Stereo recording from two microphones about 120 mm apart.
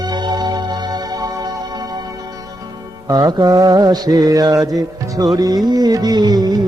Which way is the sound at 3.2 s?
35° right (ahead or behind).